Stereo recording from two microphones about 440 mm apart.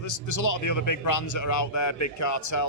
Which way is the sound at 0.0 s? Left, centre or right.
Left.